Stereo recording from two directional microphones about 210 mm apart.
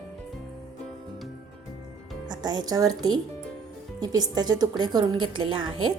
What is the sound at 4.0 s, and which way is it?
A woman's voice, 20° right (ahead or behind).